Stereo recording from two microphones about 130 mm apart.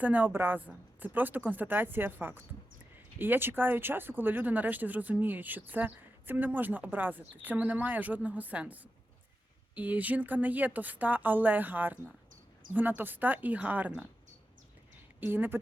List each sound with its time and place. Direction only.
0.0 s speech: 15° right (ahead or behind)
15.2 s speech: 15° right (ahead or behind)